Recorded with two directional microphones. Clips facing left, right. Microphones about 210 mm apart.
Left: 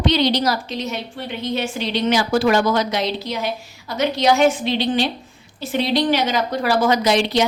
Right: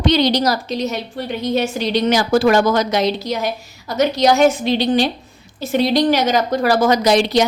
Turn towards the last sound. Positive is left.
turn(degrees=-40)  # may be behind; listen again after turning